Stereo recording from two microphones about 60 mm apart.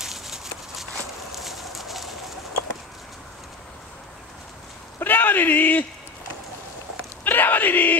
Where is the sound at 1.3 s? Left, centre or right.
Centre.